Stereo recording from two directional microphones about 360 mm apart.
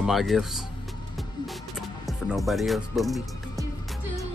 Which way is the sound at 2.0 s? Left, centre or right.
Centre.